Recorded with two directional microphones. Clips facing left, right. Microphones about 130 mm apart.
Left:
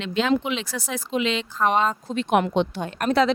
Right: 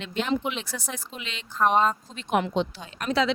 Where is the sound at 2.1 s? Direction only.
65° left (ahead or behind); by 3.3 s 50° left (ahead or behind).